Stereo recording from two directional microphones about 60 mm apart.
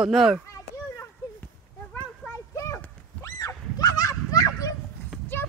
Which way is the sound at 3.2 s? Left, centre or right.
Left.